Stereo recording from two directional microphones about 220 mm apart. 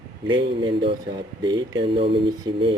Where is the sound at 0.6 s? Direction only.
25° right (ahead or behind).